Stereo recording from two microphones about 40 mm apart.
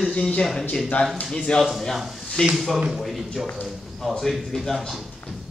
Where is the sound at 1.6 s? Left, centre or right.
Centre.